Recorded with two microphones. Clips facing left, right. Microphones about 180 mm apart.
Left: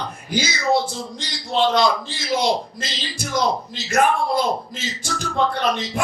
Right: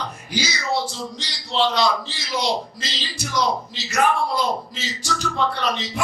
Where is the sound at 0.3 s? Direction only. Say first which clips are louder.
Left 5 dB; 50° left (ahead or behind).